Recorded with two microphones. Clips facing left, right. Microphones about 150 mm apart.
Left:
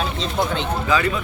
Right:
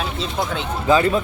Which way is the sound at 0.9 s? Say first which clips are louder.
Right 6 dB; 30° right (ahead or behind).